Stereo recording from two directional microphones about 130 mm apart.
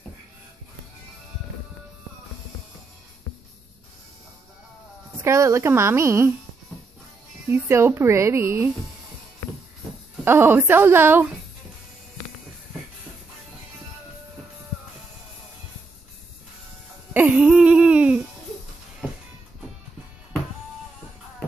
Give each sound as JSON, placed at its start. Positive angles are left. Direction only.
{"t": 5.2, "sound": "a woman's voice", "side_deg": -20}
{"t": 7.4, "sound": "a woman's voice", "side_deg": -20}
{"t": 10.2, "sound": "a woman's voice", "side_deg": -15}
{"t": 17.1, "sound": "a sound", "side_deg": -10}